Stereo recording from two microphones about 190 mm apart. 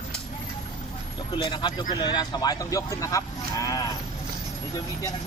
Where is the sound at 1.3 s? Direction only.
25° left (ahead or behind).